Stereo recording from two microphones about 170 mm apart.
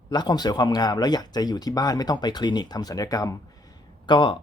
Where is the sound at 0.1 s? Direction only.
25° left (ahead or behind).